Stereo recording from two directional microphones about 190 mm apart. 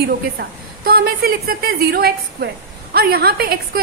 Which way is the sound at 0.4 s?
50° right (ahead or behind).